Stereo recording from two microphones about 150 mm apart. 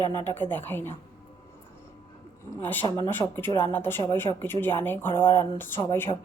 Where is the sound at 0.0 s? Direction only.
30° right (ahead or behind).